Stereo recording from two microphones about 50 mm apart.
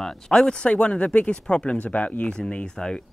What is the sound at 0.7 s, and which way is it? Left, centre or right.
Speech, left.